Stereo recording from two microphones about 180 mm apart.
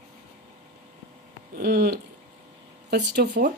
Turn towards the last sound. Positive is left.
turn(degrees=-70)  # may be behind; listen again after turning